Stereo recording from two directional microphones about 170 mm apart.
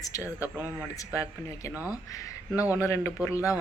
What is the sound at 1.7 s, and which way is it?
Speech, 10° right (ahead or behind).